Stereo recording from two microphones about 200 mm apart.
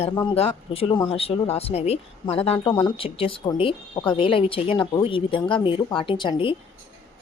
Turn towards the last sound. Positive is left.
turn(degrees=25)  # may be behind; listen again after turning